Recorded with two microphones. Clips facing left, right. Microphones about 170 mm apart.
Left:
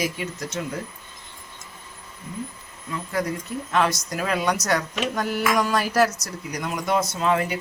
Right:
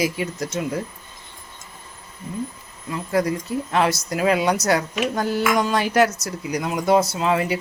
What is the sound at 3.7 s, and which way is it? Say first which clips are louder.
Speech: right 1 dB; 30° right (ahead or behind).